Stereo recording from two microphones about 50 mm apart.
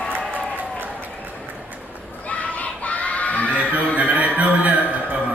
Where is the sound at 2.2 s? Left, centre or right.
Left.